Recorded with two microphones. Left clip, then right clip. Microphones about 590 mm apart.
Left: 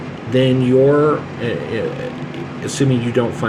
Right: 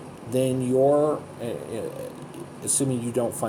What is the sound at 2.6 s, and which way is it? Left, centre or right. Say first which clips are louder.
Speech: left 8 dB; right.